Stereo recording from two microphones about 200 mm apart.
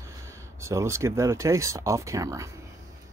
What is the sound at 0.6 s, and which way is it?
Speech, 15° right (ahead or behind).